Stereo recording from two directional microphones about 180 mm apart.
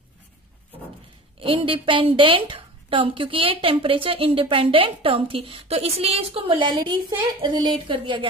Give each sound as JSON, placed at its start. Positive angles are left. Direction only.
{"t": 1.4, "sound": "a woman's voice", "side_deg": -30}